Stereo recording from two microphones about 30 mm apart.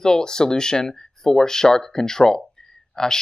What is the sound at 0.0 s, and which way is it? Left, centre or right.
Speech, left.